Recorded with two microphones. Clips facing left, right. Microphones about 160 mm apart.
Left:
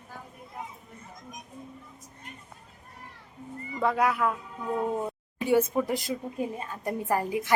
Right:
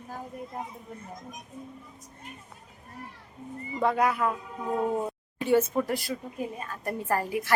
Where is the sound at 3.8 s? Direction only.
Centre (ahead or behind).